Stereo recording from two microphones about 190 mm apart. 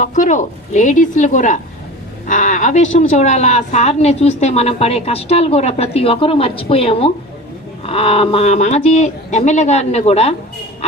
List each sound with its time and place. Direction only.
0.0 s a woman's voice: 40° left (ahead or behind)